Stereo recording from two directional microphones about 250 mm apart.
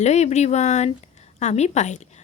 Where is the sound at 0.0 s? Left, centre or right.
Left.